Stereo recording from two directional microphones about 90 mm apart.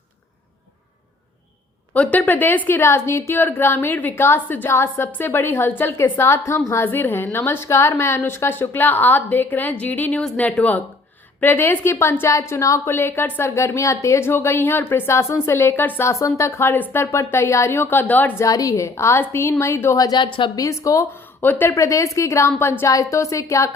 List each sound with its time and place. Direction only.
1.9 s a woman's voice: 15° left (ahead or behind)
13.6 s a woman's voice: 35° left (ahead or behind)
18.3 s a woman's voice: 40° left (ahead or behind)
20.1 s a woman's voice: 65° left (ahead or behind)
20.6 s a woman's voice: 35° left (ahead or behind)
21.4 s a woman's voice: 20° left (ahead or behind)
21.7 s a woman's voice: 35° left (ahead or behind)